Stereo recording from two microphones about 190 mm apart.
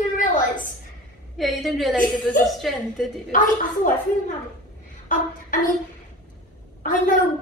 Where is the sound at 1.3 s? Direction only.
Centre (ahead or behind).